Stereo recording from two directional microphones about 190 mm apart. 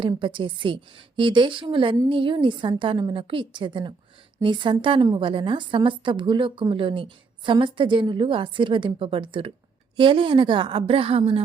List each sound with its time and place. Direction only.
0.0 s a woman's voice: 25° right (ahead or behind)